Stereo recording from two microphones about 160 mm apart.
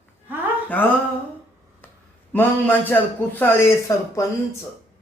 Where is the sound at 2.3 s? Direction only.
10° left (ahead or behind).